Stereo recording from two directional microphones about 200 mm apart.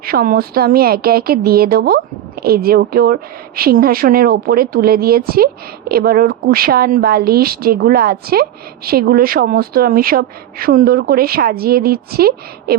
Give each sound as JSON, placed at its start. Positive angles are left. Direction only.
{"t": 0.0, "sound": "a woman's voice", "side_deg": -45}